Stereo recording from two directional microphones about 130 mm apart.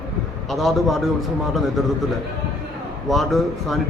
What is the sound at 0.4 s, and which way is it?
A man's voice, centre (ahead or behind).